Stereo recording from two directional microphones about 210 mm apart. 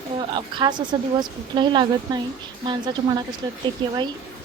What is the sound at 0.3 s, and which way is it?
Speech, 20° right (ahead or behind).